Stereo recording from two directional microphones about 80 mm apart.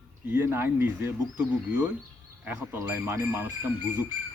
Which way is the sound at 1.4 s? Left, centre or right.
Centre.